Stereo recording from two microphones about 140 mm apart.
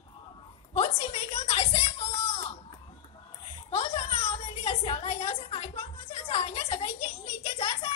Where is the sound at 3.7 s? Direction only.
45° left (ahead or behind).